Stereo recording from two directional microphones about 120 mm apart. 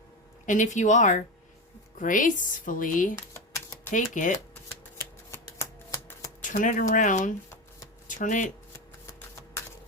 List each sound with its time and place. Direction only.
0.4 s speech: 90° left
3.3 s typing: 25° left (ahead or behind)
3.9 s speech: 90° left
5.3 s shuffling cards: 25° left (ahead or behind)
6.4 s speech: 90° left
8.0 s a sound: 90° left